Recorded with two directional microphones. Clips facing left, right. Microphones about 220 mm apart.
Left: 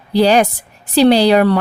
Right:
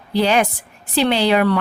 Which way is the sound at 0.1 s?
35° left (ahead or behind).